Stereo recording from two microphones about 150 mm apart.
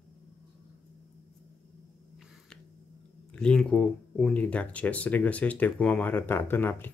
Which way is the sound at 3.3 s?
5° left (ahead or behind).